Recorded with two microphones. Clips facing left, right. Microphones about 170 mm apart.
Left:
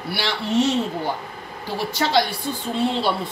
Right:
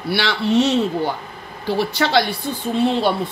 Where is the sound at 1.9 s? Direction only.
70° right (ahead or behind).